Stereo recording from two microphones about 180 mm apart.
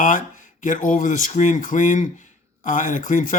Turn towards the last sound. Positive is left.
turn(degrees=45)  # may be behind; listen again after turning